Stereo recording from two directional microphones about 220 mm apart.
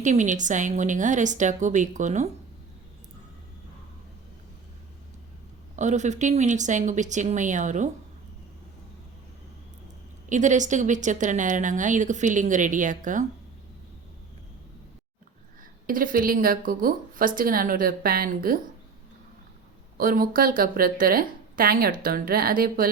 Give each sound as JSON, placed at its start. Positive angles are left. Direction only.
{"t": 0.0, "sound": "a woman's voice", "side_deg": -35}
{"t": 5.7, "sound": "a woman's voice", "side_deg": -35}
{"t": 10.2, "sound": "a woman's voice", "side_deg": -35}
{"t": 15.9, "sound": "a woman's voice", "side_deg": -40}
{"t": 20.0, "sound": "a woman's voice", "side_deg": -40}